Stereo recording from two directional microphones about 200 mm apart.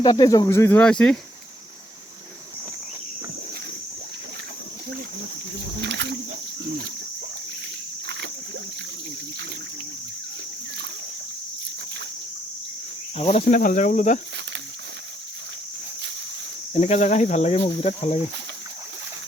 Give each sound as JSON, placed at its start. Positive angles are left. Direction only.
{"t": 0.0, "sound": "speech", "side_deg": 20}
{"t": 5.8, "sound": "wild animals", "side_deg": -60}
{"t": 8.0, "sound": "rowboat", "side_deg": -60}
{"t": 13.1, "sound": "speech", "side_deg": 35}
{"t": 16.8, "sound": "speech", "side_deg": 35}